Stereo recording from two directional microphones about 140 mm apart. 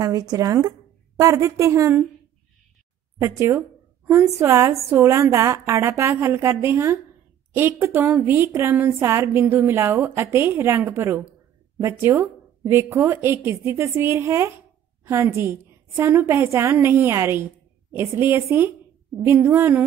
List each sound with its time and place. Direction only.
0.0 s speech: 30° right (ahead or behind)
3.2 s a woman's voice: 20° right (ahead or behind)